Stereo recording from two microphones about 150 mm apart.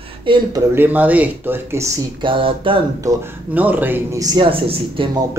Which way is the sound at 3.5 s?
10° right (ahead or behind).